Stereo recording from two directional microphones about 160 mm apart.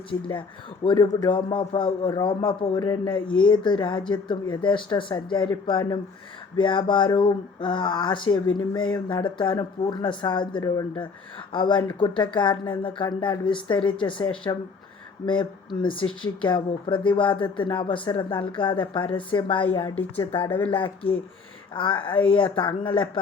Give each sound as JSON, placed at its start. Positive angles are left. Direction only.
{"t": 0.1, "sound": "a man's voice", "side_deg": 30}